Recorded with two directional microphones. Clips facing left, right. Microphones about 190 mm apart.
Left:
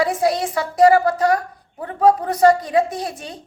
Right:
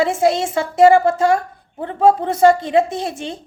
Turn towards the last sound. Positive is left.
turn(degrees=-25)  # may be behind; listen again after turning